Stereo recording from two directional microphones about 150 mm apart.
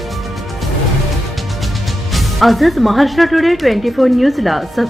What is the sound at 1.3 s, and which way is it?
Speech, centre (ahead or behind).